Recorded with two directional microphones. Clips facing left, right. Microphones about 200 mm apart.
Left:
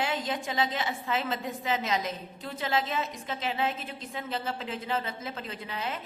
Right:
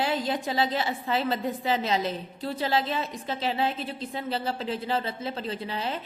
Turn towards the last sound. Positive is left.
turn(degrees=-30)  # may be behind; listen again after turning